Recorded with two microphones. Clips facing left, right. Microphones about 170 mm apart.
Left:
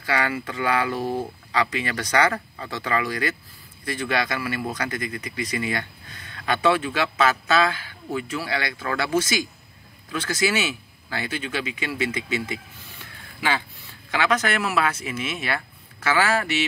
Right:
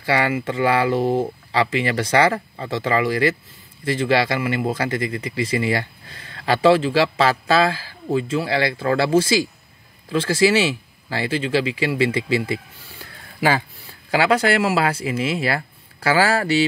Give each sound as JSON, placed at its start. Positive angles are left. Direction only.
{"t": 0.0, "sound": "speech", "side_deg": -25}